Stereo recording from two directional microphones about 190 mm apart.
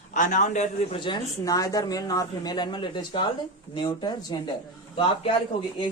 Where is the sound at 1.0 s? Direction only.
20° left (ahead or behind).